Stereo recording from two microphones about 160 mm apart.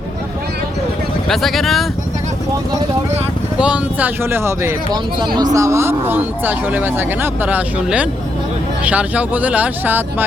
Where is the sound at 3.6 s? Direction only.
5° right (ahead or behind).